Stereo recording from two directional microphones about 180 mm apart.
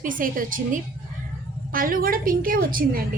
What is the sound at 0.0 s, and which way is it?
A woman's voice, 50° right (ahead or behind).